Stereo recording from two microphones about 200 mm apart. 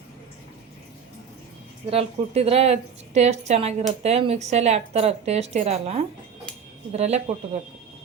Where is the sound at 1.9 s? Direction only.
30° right (ahead or behind).